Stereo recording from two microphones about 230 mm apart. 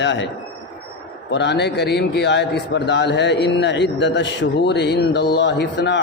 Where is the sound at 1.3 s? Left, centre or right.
Left.